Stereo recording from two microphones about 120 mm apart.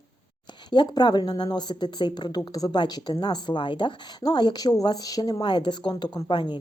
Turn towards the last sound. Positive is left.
turn(degrees=40)  # may be behind; listen again after turning